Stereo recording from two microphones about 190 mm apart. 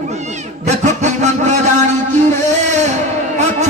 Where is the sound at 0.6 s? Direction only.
40° right (ahead or behind).